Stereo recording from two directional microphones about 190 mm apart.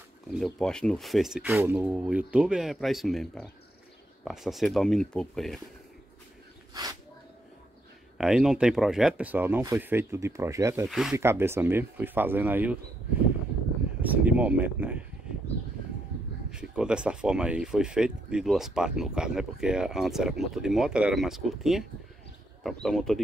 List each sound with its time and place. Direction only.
0.3 s speech: centre (ahead or behind)
6.7 s a sound: 20° right (ahead or behind)
8.2 s speech: 5° right (ahead or behind)
10.9 s speech: centre (ahead or behind)
11.1 s speech: 15° right (ahead or behind)
14.0 s speech: 10° right (ahead or behind)
16.4 s speech: 5° right (ahead or behind)